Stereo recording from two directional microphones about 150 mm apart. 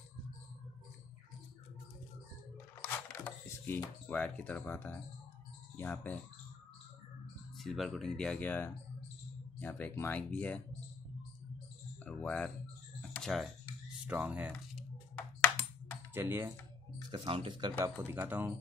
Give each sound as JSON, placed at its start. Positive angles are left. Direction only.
{"t": 2.8, "sound": "a sound", "side_deg": 15}
{"t": 5.8, "sound": "speech", "side_deg": 10}
{"t": 7.5, "sound": "speech", "side_deg": 0}
{"t": 12.0, "sound": "speech", "side_deg": 10}
{"t": 13.1, "sound": "music", "side_deg": 0}
{"t": 14.0, "sound": "speech", "side_deg": -10}
{"t": 14.5, "sound": "ping", "side_deg": 5}
{"t": 16.1, "sound": "speech", "side_deg": -15}
{"t": 17.1, "sound": "speech", "side_deg": -35}
{"t": 17.7, "sound": "speech", "side_deg": -15}